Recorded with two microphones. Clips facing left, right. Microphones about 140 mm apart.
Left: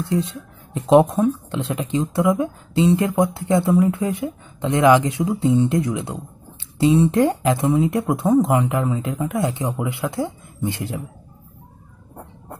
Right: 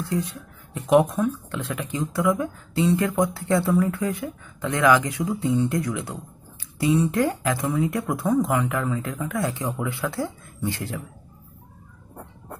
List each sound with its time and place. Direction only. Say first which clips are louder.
0.0 s speech: left 4 dB; 25° left (ahead or behind)